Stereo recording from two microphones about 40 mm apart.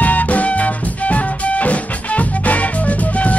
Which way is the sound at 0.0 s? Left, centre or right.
Left.